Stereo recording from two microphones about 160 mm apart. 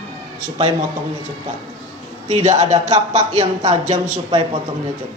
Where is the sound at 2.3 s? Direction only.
45° right (ahead or behind).